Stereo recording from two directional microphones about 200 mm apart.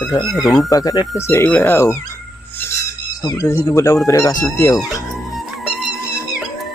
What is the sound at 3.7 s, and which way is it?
Speech, 15° left (ahead or behind).